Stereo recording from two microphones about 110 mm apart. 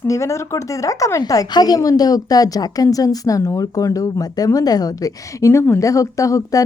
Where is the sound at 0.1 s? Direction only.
25° left (ahead or behind).